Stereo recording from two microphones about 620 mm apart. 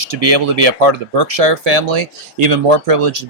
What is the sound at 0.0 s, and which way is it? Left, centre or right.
Speech, right.